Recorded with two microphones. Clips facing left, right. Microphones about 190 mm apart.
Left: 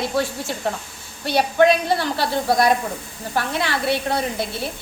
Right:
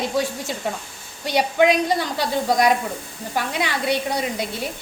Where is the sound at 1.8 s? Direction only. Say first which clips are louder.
Left 1 dB; 15° right (ahead or behind).